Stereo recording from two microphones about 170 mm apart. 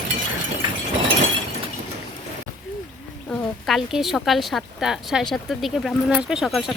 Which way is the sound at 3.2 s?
Centre (ahead or behind).